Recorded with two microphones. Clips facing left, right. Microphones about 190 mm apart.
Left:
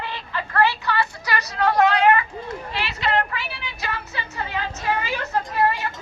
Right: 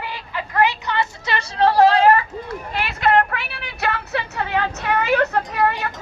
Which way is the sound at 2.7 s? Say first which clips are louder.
Right 6 dB; 50° right (ahead or behind).